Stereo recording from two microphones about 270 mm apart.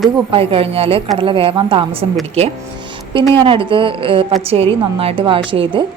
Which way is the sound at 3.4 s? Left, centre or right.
Centre.